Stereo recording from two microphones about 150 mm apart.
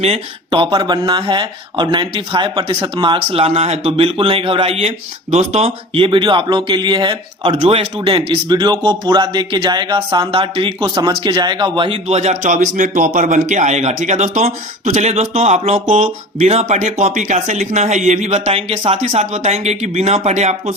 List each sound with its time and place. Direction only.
0.0 s speech: 40° right (ahead or behind)